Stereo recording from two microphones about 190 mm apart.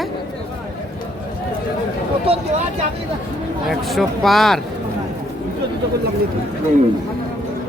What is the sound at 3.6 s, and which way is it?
Speech, centre (ahead or behind).